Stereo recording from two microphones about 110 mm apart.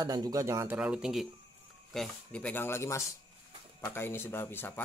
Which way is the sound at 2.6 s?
25° left (ahead or behind).